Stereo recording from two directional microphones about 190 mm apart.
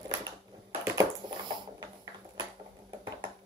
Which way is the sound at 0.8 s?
15° right (ahead or behind).